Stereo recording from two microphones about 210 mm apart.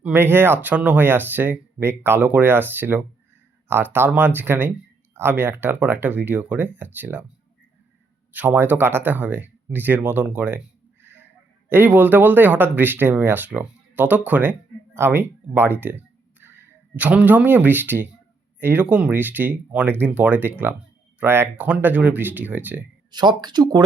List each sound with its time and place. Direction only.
0.0 s speech: 10° right (ahead or behind)
8.3 s speech: 5° right (ahead or behind)
23.1 s speech: 20° right (ahead or behind)